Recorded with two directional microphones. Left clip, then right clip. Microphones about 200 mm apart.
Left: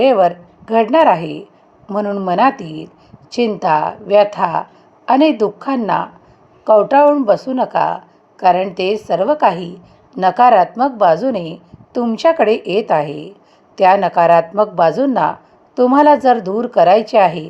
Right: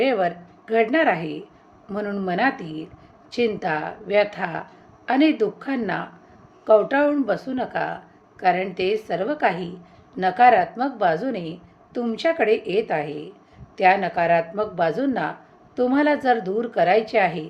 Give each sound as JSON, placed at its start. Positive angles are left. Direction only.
{"t": 0.0, "sound": "a woman's voice", "side_deg": 25}